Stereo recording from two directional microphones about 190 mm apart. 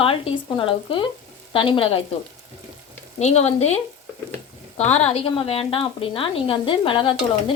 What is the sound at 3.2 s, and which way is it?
Speech, 35° left (ahead or behind).